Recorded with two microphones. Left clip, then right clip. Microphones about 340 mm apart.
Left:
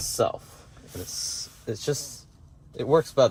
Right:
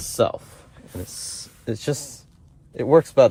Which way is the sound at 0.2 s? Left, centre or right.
Right.